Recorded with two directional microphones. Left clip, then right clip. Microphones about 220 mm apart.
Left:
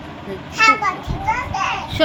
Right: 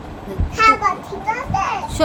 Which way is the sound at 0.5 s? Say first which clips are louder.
Even; 25° right (ahead or behind).